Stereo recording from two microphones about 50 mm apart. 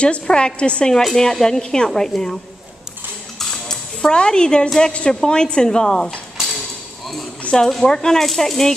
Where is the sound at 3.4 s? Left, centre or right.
Centre.